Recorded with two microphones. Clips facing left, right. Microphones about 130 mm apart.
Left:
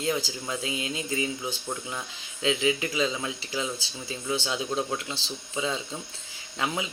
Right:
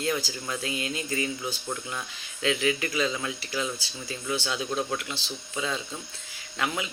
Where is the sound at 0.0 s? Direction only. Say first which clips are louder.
Even; 20° left (ahead or behind).